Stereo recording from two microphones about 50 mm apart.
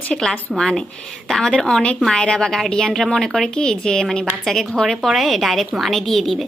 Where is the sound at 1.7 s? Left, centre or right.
Centre.